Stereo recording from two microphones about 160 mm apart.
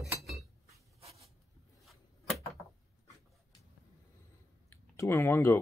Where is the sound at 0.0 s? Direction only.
Centre (ahead or behind).